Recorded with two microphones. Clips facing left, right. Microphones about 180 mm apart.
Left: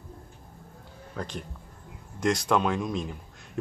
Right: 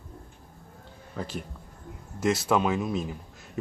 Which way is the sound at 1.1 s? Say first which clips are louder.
Right 1 dB; 5° right (ahead or behind).